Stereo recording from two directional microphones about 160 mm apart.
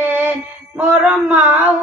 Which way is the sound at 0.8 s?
10° right (ahead or behind).